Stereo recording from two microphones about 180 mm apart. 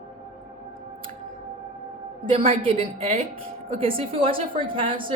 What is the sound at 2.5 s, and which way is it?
A woman's voice, 30° right (ahead or behind).